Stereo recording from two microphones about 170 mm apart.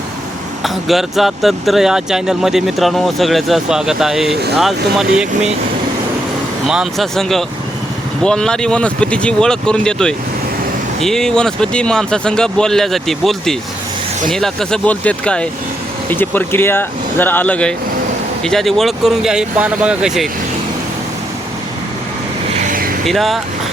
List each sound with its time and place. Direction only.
0.6 s speech: centre (ahead or behind)
6.7 s speech: centre (ahead or behind)
22.5 s vehicle: 50° right (ahead or behind)
23.0 s speech: centre (ahead or behind)